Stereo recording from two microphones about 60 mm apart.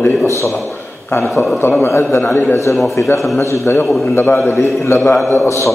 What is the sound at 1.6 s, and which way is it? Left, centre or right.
A man's voice, left.